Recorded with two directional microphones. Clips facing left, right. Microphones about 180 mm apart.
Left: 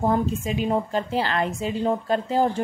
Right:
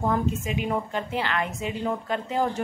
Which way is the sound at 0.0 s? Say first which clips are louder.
Left 3 dB; 30° left (ahead or behind).